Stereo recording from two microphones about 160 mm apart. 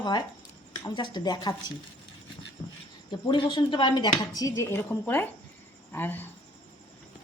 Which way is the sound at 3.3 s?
30° left (ahead or behind).